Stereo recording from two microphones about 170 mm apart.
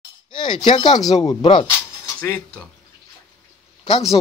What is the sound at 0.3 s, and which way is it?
Speech, 30° left (ahead or behind).